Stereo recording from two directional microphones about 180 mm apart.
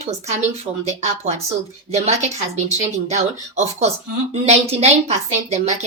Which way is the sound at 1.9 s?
40° right (ahead or behind).